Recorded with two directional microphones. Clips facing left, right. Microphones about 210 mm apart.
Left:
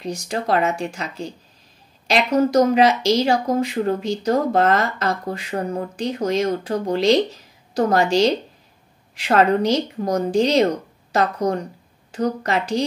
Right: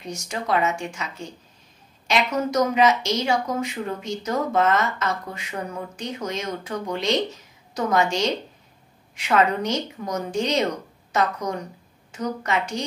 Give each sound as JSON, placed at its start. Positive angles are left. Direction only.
{"t": 0.0, "sound": "a woman's voice", "side_deg": 35}